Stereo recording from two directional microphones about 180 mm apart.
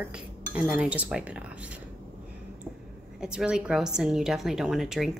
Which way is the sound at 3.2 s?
5° right (ahead or behind).